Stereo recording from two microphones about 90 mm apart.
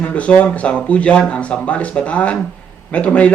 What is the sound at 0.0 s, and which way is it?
A man's voice, 15° left (ahead or behind).